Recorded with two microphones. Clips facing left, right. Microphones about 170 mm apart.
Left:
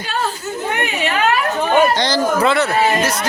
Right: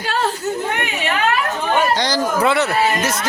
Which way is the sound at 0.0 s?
75° right (ahead or behind).